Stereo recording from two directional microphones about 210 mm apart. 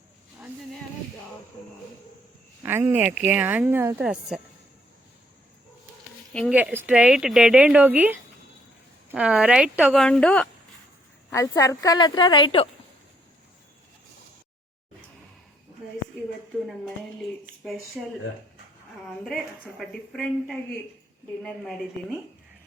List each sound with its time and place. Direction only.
2.6 s speech: 10° right (ahead or behind)
6.5 s a woman's voice: 5° right (ahead or behind); by 12.6 s 25° left (ahead or behind)
16.6 s a sound: centre (ahead or behind)
19.0 s speech: centre (ahead or behind)